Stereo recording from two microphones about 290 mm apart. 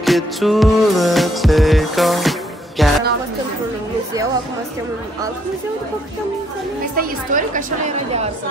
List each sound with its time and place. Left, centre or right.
0.0 s music: centre
7.0 s a woman's voice: right